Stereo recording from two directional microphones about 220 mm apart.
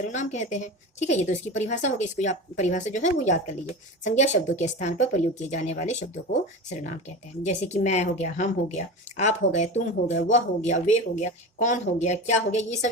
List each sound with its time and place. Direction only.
0.1 s a woman's voice: 30° left (ahead or behind)
7.4 s a woman's voice: 30° left (ahead or behind)